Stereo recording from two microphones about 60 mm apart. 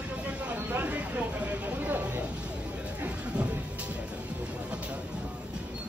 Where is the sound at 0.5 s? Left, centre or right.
Right.